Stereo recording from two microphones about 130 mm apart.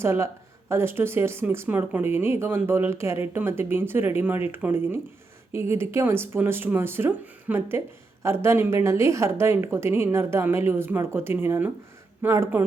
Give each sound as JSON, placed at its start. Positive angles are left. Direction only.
{"t": 0.0, "sound": "a woman's voice", "side_deg": -20}